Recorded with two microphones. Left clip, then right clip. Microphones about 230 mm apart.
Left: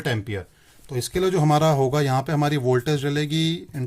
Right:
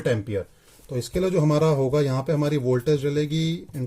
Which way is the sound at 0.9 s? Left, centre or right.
Left.